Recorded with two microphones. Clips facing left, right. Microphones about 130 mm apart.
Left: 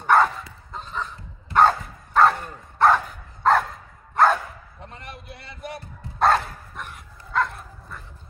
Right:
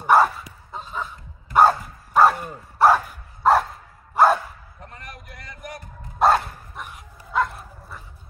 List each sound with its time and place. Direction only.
0.0 s dog: 10° right (ahead or behind)
4.8 s a sound: 25° left (ahead or behind)
6.1 s bow-wow: centre (ahead or behind)